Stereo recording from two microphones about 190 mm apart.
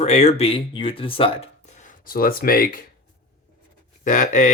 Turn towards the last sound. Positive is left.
turn(degrees=40)  # may be behind; listen again after turning